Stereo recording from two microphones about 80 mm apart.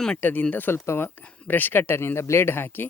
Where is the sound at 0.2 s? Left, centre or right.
Left.